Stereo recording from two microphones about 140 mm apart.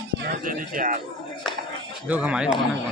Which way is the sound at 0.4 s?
70° right (ahead or behind).